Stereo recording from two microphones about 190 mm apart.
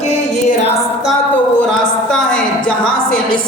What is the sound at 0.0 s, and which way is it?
Music, 35° left (ahead or behind).